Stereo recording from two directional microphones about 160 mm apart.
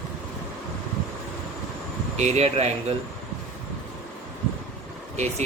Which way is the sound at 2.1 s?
45° right (ahead or behind).